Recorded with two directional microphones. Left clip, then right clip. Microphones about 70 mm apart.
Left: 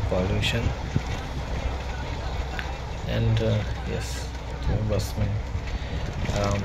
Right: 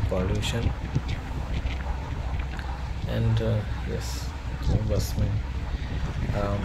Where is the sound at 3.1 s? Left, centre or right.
Centre.